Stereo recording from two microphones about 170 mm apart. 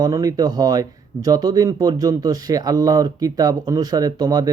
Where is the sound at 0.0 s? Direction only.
20° right (ahead or behind).